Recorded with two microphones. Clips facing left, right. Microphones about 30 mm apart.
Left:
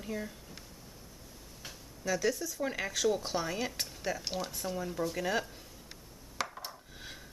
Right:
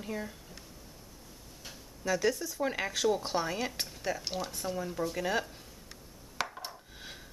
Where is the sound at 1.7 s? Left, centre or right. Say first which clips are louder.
Right 2 dB; centre.